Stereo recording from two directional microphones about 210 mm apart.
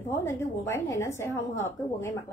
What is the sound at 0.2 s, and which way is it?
A woman's voice, 10° left (ahead or behind).